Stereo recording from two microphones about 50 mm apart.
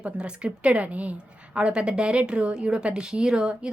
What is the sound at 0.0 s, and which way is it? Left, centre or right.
Speech, right.